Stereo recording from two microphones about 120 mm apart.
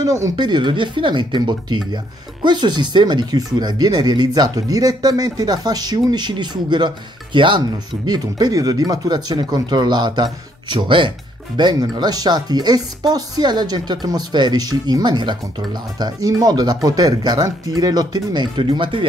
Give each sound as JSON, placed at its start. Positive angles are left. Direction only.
{"t": 0.0, "sound": "speech", "side_deg": -30}